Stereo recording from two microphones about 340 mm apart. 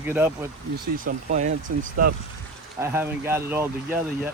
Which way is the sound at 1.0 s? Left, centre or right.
Right.